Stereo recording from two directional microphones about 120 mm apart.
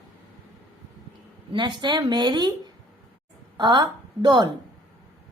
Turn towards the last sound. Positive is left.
turn(degrees=-40)  # may be behind; listen again after turning